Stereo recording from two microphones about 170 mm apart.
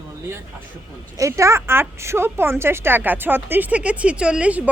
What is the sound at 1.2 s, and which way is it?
Speech, 15° right (ahead or behind).